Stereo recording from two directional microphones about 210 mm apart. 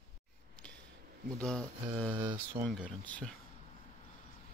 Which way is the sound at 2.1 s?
25° right (ahead or behind).